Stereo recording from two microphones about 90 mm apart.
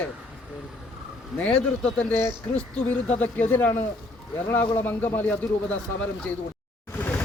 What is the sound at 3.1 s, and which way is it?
Speech, 20° left (ahead or behind).